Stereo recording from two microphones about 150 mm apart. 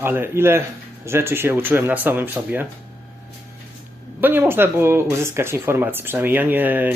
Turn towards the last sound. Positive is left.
turn(degrees=-10)  # may be behind; listen again after turning